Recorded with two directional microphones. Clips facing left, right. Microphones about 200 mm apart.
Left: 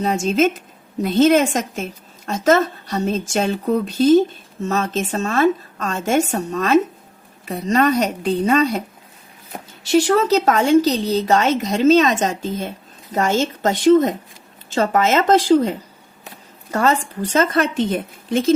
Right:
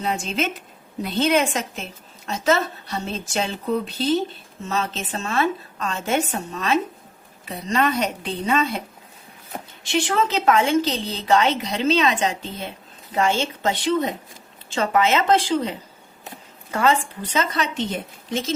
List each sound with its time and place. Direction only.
0.0 s a woman's voice: 40° left (ahead or behind)
9.8 s a woman's voice: 40° left (ahead or behind)
16.7 s a woman's voice: 45° left (ahead or behind)